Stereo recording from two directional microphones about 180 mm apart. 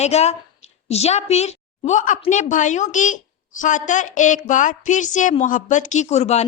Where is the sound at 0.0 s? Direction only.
35° left (ahead or behind).